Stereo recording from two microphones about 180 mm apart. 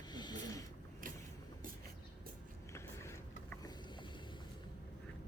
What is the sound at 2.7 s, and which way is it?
Vehicle, 15° left (ahead or behind).